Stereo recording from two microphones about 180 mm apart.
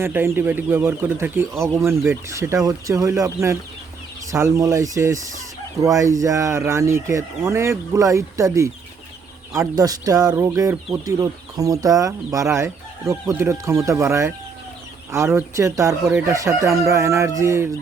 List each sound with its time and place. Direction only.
0.0 s speech: 15° right (ahead or behind)
15.4 s speech: 15° right (ahead or behind)